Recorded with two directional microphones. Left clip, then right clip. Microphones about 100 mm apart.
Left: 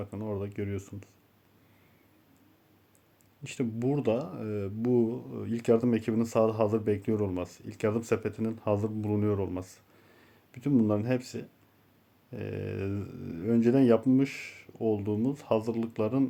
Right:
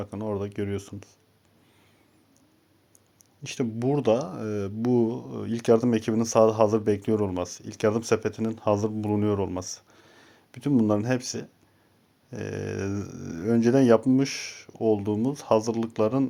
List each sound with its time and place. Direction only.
0.0 s speech: 25° right (ahead or behind)
3.4 s speech: 25° right (ahead or behind)